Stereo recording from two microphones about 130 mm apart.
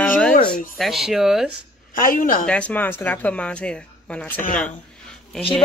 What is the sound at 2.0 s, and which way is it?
Speech, 90° left.